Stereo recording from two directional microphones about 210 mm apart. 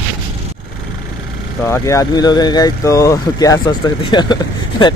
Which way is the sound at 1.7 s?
15° left (ahead or behind).